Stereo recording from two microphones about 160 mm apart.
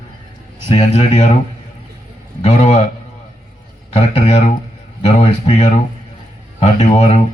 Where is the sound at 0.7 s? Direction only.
40° left (ahead or behind).